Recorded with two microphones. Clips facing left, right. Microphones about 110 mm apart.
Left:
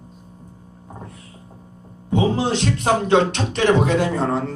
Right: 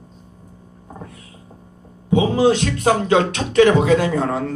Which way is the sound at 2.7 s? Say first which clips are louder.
Right 1 dB; 50° right (ahead or behind).